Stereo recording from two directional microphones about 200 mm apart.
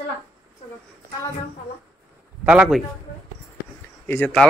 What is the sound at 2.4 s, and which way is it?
Speech, 5° right (ahead or behind).